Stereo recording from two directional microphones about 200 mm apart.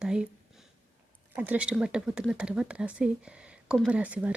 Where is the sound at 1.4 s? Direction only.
5° right (ahead or behind).